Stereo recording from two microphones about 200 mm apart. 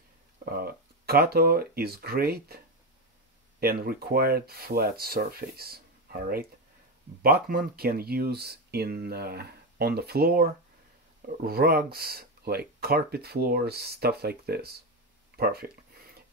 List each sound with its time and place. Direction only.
0.5 s speech: 50° right (ahead or behind)
3.5 s speech: 50° right (ahead or behind)